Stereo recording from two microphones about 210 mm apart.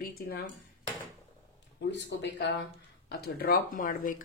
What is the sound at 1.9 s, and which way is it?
Speech, 55° left (ahead or behind).